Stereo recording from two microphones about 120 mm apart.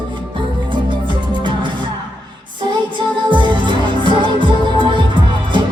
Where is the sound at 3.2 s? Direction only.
40° right (ahead or behind).